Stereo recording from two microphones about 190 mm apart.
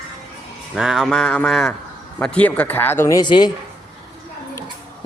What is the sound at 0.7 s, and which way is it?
A man's voice, centre (ahead or behind).